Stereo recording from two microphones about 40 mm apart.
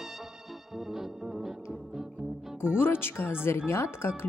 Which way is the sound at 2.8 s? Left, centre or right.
Left.